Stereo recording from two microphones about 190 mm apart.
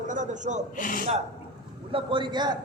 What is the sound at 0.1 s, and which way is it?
Speech, 40° right (ahead or behind).